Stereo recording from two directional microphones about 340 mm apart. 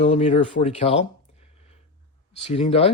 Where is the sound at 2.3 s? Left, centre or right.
Centre.